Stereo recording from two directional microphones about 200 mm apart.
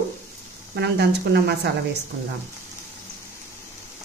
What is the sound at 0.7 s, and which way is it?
Speech, 55° right (ahead or behind).